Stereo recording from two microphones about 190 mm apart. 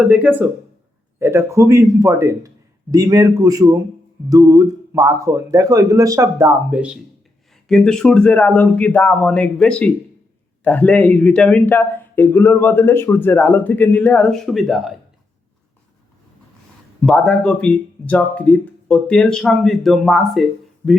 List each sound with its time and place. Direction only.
0.0 s a man's voice: 5° right (ahead or behind)
17.0 s speech: centre (ahead or behind)